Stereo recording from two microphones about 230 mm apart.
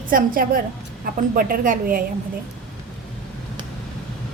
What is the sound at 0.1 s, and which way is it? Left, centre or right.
Speech, right.